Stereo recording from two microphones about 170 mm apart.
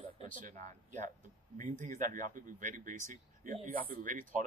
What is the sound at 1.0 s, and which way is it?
Speech, 45° right (ahead or behind).